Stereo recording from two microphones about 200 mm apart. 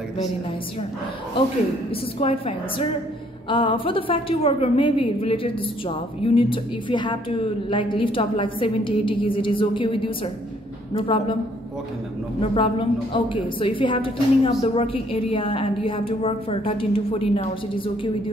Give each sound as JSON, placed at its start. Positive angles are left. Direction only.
{"t": 2.1, "sound": "a woman's voice", "side_deg": 30}
{"t": 12.4, "sound": "a woman's voice", "side_deg": 25}